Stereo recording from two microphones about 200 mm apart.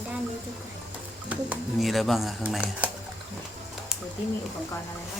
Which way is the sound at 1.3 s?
5° right (ahead or behind).